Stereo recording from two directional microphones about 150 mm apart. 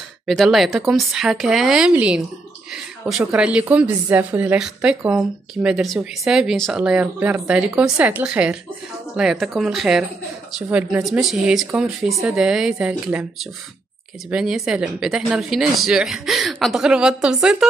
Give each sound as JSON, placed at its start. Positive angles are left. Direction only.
{"t": 0.3, "sound": "a woman's voice", "side_deg": 0}